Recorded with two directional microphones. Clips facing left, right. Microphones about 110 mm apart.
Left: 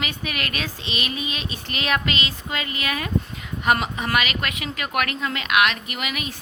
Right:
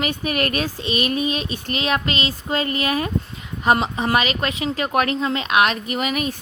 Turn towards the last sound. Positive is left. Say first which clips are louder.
# right 7 dB
turn(degrees=-40)  # may be behind; listen again after turning